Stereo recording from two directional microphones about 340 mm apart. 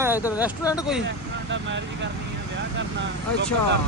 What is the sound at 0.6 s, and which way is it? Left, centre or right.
Speech, centre.